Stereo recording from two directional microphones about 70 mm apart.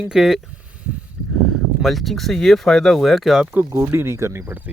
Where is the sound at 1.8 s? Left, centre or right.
Centre.